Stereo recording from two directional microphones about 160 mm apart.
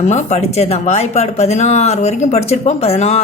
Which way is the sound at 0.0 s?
45° left (ahead or behind).